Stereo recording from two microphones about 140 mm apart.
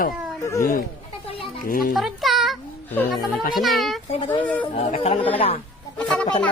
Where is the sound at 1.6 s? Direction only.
90° left.